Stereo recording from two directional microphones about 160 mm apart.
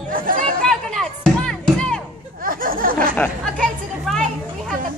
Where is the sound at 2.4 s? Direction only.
60° right (ahead or behind).